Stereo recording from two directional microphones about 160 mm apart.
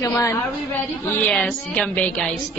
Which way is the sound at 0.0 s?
20° left (ahead or behind).